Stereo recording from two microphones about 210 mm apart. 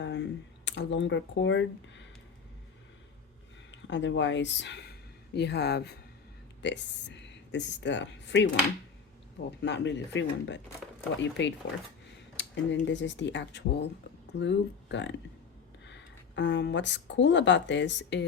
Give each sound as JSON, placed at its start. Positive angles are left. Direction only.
{"t": 0.0, "sound": "speech", "side_deg": 60}
{"t": 3.7, "sound": "speech", "side_deg": 60}
{"t": 9.6, "sound": "speech", "side_deg": 55}